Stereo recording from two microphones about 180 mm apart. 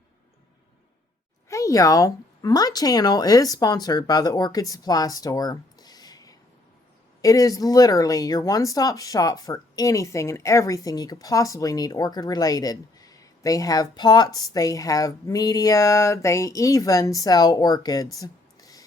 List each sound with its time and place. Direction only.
1.5 s speech: 15° left (ahead or behind)